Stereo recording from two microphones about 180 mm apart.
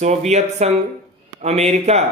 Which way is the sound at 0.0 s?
40° right (ahead or behind).